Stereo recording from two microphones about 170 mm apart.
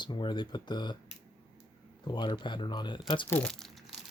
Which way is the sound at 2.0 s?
25° left (ahead or behind).